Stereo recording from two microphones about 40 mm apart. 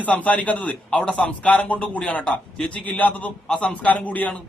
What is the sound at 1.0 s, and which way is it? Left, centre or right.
A man's voice, left.